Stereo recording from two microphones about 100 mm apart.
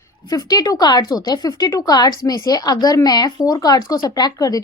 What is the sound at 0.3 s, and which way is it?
A woman's voice, 40° left (ahead or behind).